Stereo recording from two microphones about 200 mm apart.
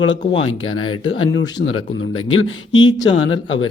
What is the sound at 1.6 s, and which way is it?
Speech, 90° left.